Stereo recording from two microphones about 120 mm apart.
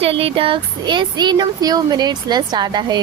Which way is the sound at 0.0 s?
50° right (ahead or behind).